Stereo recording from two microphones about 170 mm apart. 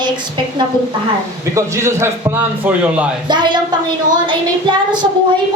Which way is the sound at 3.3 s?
25° right (ahead or behind).